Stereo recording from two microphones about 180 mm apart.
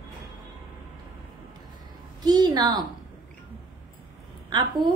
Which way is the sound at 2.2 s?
20° right (ahead or behind).